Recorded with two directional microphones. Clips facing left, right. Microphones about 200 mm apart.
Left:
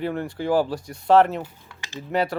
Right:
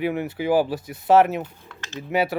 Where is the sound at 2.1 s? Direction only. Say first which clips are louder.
Right 1 dB; 5° right (ahead or behind).